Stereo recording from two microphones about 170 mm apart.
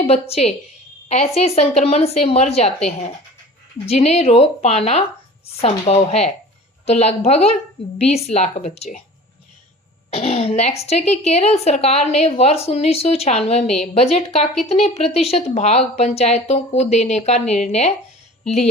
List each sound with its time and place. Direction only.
0.0 s a woman's voice: 35° left (ahead or behind)
3.8 s a woman's voice: 40° left (ahead or behind)
10.1 s a woman's voice: 35° left (ahead or behind)